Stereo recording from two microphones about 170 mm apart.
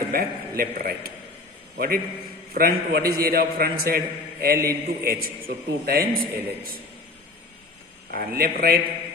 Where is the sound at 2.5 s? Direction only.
60° right (ahead or behind).